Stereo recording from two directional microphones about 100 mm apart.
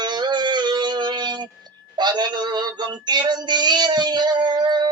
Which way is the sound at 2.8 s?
45° right (ahead or behind).